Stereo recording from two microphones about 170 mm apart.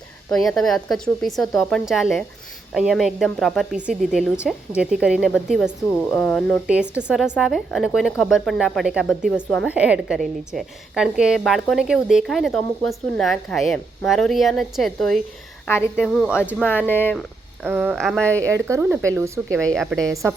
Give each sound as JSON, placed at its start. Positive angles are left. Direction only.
{"t": 0.3, "sound": "a woman's voice", "side_deg": 5}
{"t": 6.7, "sound": "a woman's voice", "side_deg": -5}
{"t": 15.6, "sound": "a woman's voice", "side_deg": 15}
{"t": 16.0, "sound": "a woman's voice", "side_deg": 0}
{"t": 16.6, "sound": "speech", "side_deg": 10}
{"t": 17.6, "sound": "speech", "side_deg": -10}
{"t": 17.9, "sound": "speech", "side_deg": 0}
{"t": 18.5, "sound": "speech", "side_deg": -15}
{"t": 19.5, "sound": "a woman's voice", "side_deg": 5}